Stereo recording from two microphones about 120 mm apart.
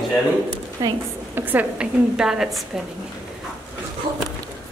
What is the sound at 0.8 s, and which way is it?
Speech, 30° right (ahead or behind).